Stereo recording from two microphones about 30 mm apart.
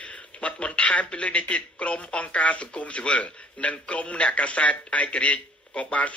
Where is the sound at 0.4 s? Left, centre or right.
Left.